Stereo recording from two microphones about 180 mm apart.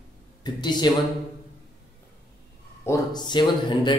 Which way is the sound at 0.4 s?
25° left (ahead or behind).